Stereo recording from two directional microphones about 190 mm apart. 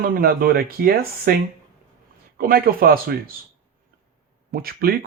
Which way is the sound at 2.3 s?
50° right (ahead or behind).